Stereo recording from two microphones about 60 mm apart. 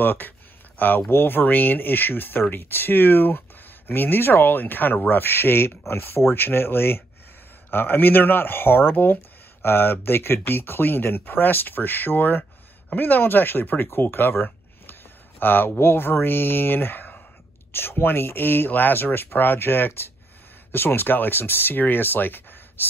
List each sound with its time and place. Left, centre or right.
0.0 s speech: left